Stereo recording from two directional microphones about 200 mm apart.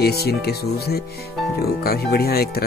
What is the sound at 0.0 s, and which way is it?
Speech, 50° left (ahead or behind).